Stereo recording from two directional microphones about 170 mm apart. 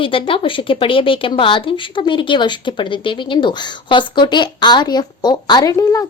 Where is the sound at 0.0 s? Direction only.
30° left (ahead or behind).